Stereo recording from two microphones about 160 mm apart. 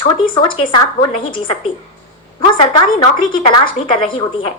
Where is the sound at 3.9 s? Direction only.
30° left (ahead or behind).